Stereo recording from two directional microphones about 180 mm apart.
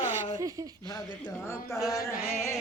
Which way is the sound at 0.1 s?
15° right (ahead or behind).